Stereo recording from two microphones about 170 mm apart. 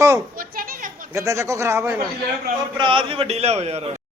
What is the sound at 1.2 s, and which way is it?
Speech, 20° right (ahead or behind).